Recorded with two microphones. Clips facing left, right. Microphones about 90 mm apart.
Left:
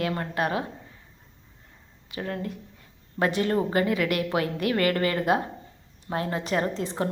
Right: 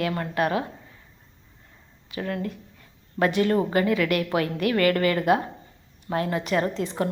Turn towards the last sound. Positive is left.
turn(degrees=25)  # may be behind; listen again after turning